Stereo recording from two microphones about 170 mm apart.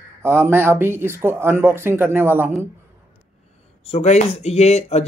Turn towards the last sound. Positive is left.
turn(degrees=40)  # may be behind; listen again after turning